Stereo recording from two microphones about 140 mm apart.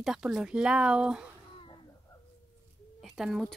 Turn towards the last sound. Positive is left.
turn(degrees=0)  # may be behind; listen again after turning